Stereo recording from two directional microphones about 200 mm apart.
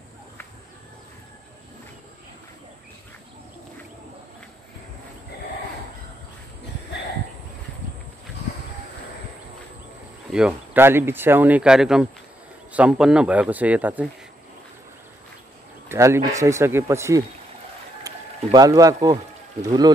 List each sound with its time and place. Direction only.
10.3 s speech: 5° right (ahead or behind)
15.9 s speech: 15° right (ahead or behind)
18.0 s a sound: 20° right (ahead or behind)
19.6 s speech: 20° right (ahead or behind)